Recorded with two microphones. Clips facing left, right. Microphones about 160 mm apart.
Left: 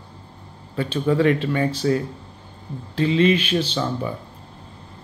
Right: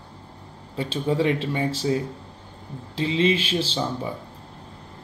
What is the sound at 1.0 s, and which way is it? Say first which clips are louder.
Speech: left 4 dB; 20° right (ahead or behind).